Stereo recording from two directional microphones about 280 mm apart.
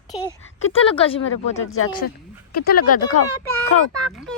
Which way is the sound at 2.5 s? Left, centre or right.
Left.